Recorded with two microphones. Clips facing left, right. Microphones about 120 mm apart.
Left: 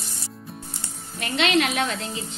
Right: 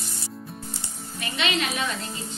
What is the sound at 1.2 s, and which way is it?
Speech, 65° left (ahead or behind).